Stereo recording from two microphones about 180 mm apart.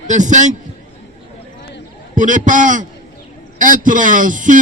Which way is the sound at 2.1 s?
45° right (ahead or behind).